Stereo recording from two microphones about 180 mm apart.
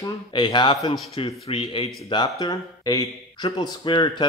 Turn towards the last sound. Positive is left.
turn(degrees=25)  # may be behind; listen again after turning